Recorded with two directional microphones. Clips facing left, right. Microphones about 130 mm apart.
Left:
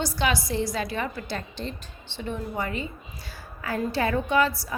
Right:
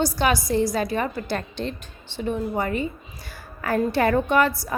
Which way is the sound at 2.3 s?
40° right (ahead or behind).